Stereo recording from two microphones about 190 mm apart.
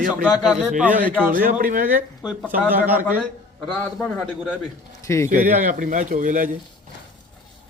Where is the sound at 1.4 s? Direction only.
45° right (ahead or behind).